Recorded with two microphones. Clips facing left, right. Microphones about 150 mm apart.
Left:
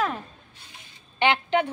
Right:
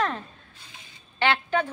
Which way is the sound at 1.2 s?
20° left (ahead or behind).